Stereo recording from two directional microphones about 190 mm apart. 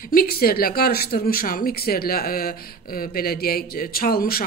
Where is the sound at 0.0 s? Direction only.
50° left (ahead or behind).